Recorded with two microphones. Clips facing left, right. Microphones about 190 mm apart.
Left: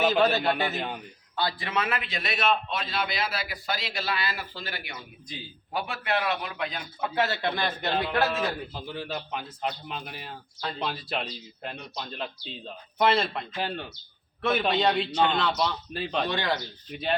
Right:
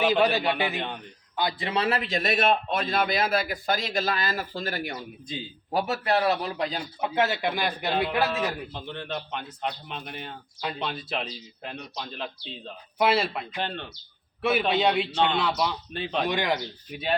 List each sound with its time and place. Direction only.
0.0 s a man's voice: 15° right (ahead or behind)
0.8 s speech: 5° left (ahead or behind)
1.4 s a man's voice: 20° right (ahead or behind)
7.0 s a man's voice: 20° right (ahead or behind)
8.2 s speech: 5° left (ahead or behind)
13.7 s speech: 5° left (ahead or behind)
14.4 s a man's voice: 5° right (ahead or behind)
16.2 s a man's voice: 15° right (ahead or behind)
16.9 s speech: 5° right (ahead or behind)